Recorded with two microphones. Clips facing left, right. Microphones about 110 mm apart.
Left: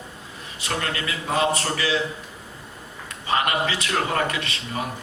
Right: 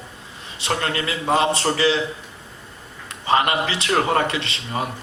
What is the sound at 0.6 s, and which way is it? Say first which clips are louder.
A man's voice: right 4 dB; 30° right (ahead or behind).